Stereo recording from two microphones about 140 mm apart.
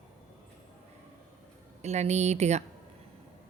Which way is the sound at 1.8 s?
55° right (ahead or behind).